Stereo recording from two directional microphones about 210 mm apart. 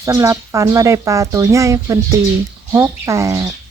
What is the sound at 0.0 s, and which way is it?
Speech, 15° right (ahead or behind).